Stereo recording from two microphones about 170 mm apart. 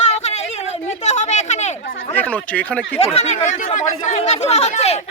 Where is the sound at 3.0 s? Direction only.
35° left (ahead or behind).